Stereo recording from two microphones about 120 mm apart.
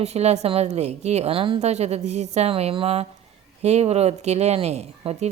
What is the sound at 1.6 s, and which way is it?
Speech, 65° right (ahead or behind).